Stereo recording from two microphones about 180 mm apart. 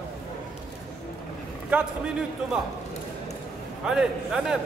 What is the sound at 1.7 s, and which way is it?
Speech, 5° right (ahead or behind).